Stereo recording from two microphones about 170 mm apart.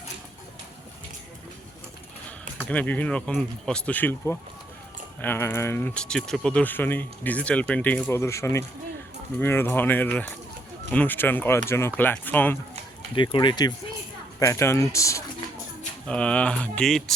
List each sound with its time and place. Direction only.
2.6 s speech: 10° left (ahead or behind)
13.1 s speech: 30° left (ahead or behind)
16.0 s speech: 5° left (ahead or behind)